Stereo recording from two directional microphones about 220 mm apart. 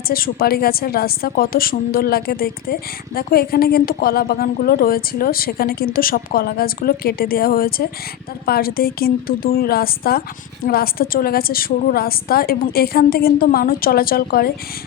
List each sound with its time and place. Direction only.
0.1 s a woman's voice: 40° left (ahead or behind)